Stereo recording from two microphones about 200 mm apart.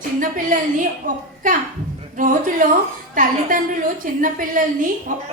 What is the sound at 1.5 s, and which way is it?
A woman's voice, 45° right (ahead or behind).